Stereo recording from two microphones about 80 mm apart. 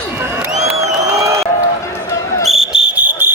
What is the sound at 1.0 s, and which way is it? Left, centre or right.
Crowd, right.